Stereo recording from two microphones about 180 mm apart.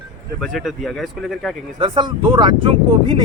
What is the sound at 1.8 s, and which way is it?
Speech, 25° right (ahead or behind).